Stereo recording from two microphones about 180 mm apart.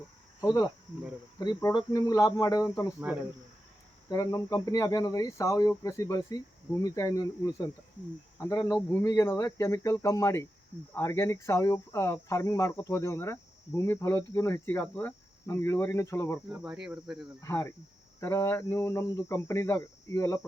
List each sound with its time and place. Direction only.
0.4 s speech: 20° left (ahead or behind)
3.1 s speech: 10° right (ahead or behind)
4.1 s speech: 20° left (ahead or behind)
16.5 s speech: 5° right (ahead or behind)
17.4 s speech: 15° left (ahead or behind)